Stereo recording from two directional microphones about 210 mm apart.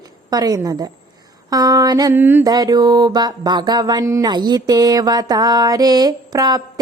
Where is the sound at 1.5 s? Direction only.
15° right (ahead or behind).